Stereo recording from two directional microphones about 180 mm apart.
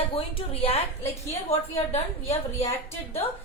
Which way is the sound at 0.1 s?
30° left (ahead or behind).